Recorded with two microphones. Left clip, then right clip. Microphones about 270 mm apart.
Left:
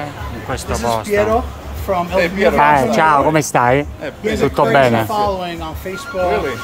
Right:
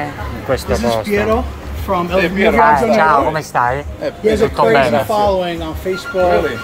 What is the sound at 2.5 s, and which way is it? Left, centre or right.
Speech, left.